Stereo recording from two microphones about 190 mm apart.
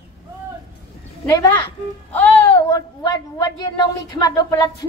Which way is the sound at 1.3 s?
15° left (ahead or behind).